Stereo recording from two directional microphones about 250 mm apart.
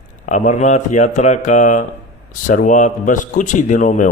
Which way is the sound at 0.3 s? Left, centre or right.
Left.